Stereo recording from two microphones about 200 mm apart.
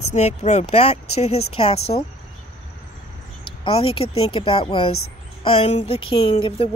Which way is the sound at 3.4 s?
25° left (ahead or behind).